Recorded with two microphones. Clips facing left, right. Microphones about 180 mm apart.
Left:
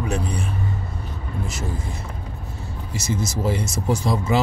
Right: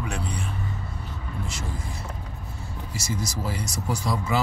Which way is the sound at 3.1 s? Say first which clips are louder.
Left 7 dB; 25° left (ahead or behind).